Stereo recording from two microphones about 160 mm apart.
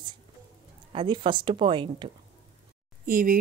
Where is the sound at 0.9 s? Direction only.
30° right (ahead or behind).